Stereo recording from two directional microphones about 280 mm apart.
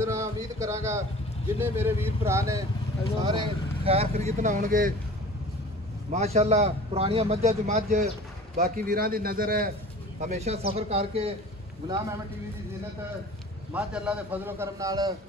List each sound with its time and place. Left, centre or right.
0.0 s a sound: centre
1.6 s a man's voice: centre; by 4.9 s right
6.0 s a man's voice: right
13.7 s a man's voice: centre